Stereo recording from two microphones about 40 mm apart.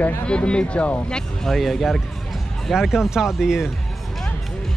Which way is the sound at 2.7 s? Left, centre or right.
Centre.